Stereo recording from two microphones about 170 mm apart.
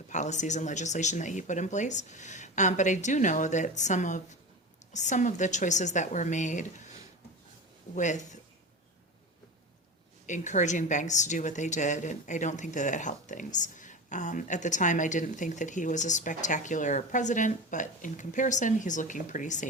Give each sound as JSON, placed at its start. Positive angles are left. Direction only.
{"t": 0.1, "sound": "a woman's voice", "side_deg": 45}
{"t": 7.9, "sound": "a woman's voice", "side_deg": 45}
{"t": 10.2, "sound": "a woman's voice", "side_deg": 45}